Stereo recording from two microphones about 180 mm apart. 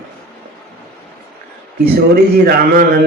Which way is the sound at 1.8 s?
55° right (ahead or behind).